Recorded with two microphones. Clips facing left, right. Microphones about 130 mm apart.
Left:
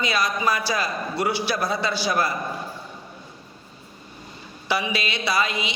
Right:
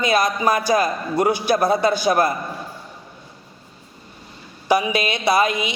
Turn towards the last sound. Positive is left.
turn(degrees=-50)  # may be behind; listen again after turning